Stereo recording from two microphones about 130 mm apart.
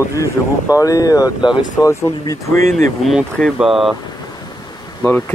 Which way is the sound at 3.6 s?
Centre (ahead or behind).